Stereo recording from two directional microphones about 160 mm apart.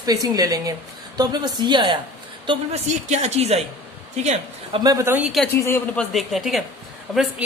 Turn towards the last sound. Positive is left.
turn(degrees=0)  # may be behind; listen again after turning